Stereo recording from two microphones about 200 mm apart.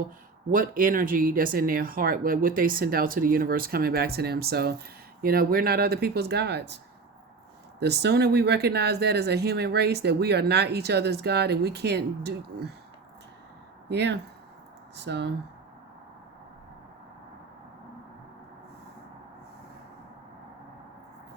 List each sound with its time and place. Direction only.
0.5 s speech: 45° right (ahead or behind)
7.8 s speech: 55° right (ahead or behind)
13.8 s speech: 60° right (ahead or behind)